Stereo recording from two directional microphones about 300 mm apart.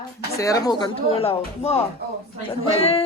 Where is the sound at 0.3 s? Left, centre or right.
Centre.